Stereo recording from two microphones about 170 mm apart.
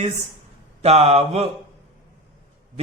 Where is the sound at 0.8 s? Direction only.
40° right (ahead or behind).